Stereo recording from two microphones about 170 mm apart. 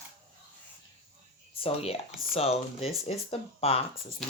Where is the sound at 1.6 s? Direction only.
35° left (ahead or behind).